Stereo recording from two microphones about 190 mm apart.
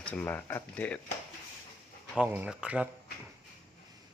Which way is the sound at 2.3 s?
5° right (ahead or behind).